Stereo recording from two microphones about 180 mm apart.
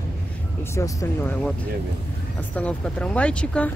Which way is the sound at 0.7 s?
15° left (ahead or behind).